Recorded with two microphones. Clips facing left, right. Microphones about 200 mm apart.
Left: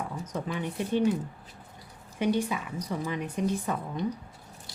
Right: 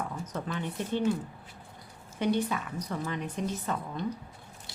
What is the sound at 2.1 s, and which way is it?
A woman's voice, 10° left (ahead or behind).